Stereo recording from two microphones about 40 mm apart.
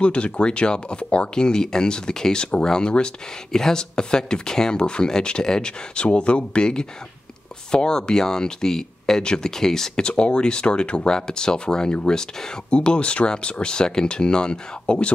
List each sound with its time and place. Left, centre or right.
0.0 s speech: left; by 9.2 s centre
9.2 s speech: left
9.6 s speech: centre
10.0 s speech: left